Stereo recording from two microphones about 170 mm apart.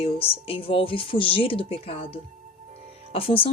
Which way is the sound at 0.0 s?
35° left (ahead or behind).